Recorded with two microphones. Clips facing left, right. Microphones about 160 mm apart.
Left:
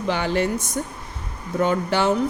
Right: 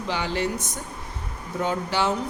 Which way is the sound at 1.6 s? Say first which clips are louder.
Left 4 dB; 55° left (ahead or behind).